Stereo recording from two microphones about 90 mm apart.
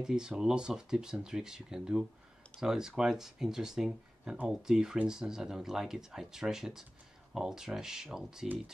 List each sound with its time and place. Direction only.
0.0 s speech: 5° right (ahead or behind)